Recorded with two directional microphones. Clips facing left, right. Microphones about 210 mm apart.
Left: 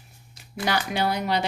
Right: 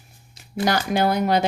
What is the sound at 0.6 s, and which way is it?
Speech, 45° right (ahead or behind).